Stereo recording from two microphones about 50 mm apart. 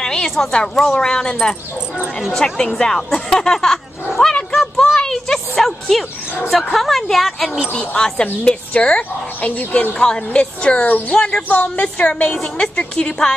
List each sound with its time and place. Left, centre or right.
0.0 s a woman's voice: centre
2.3 s speech: centre
4.7 s a sound: centre
6.7 s speech: centre
7.9 s a woman's voice: centre
9.9 s a woman's voice: centre
11.1 s a woman's voice: centre
11.4 s a woman's voice: left